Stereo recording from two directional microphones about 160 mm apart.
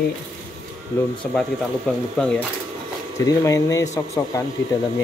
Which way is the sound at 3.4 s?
20° left (ahead or behind).